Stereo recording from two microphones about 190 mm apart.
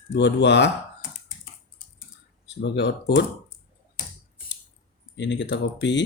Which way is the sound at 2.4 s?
65° left (ahead or behind).